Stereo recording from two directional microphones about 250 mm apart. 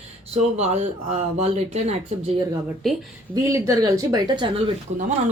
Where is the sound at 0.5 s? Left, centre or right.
Right.